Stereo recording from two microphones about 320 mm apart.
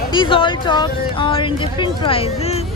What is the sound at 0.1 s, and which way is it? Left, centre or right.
Speech, centre.